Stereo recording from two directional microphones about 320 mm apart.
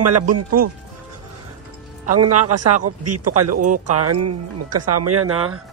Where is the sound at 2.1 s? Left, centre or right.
Right.